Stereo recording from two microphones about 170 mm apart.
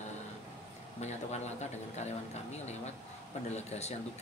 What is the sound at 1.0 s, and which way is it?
Speech, 40° left (ahead or behind).